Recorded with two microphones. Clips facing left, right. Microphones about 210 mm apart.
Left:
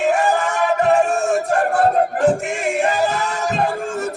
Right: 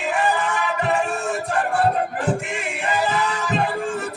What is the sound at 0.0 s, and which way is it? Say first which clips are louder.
Music: left 5 dB; 45° left (ahead or behind).